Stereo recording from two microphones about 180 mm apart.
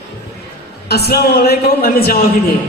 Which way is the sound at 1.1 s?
60° left (ahead or behind).